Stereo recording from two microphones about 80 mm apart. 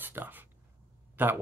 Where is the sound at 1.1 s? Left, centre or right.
Right.